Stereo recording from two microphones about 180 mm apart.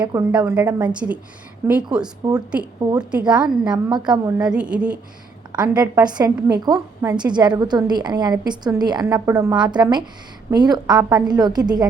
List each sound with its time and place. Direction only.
0.1 s a woman's voice: 10° right (ahead or behind)
4.1 s a woman's voice: 20° right (ahead or behind)
4.5 s a woman's voice: 5° right (ahead or behind)
5.9 s a woman's voice: 20° right (ahead or behind)